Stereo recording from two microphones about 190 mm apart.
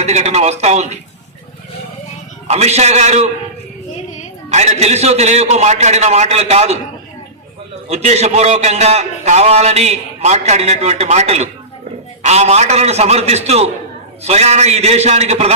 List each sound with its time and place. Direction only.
0.0 s a man's voice: 35° right (ahead or behind)
2.5 s a man's voice: 35° right (ahead or behind)
4.4 s a man's voice: 35° right (ahead or behind)
7.9 s a man's voice: 35° right (ahead or behind)